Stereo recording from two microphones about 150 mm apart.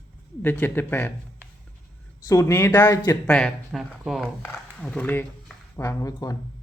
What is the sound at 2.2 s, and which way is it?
Speech, 20° left (ahead or behind).